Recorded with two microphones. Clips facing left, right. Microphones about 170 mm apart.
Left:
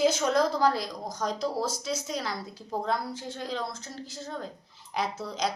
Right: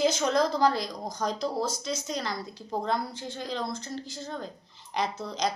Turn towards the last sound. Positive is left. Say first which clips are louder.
# right 1 dB
turn(degrees=5)  # may be behind; listen again after turning